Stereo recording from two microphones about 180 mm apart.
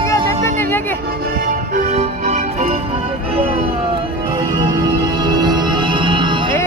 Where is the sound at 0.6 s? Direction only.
10° left (ahead or behind).